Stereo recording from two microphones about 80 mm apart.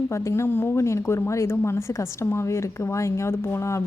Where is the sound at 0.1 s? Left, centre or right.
Left.